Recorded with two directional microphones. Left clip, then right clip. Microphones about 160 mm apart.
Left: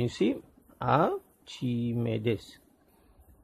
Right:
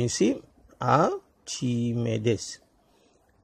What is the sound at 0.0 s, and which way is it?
Speech, 20° right (ahead or behind).